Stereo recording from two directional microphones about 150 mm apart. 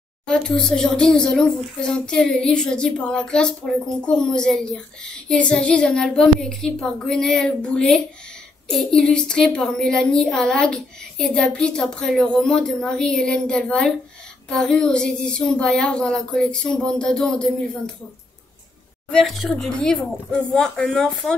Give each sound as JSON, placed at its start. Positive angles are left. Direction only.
{"t": 0.3, "sound": "a woman's voice", "side_deg": 5}
{"t": 19.0, "sound": "a woman's voice", "side_deg": 0}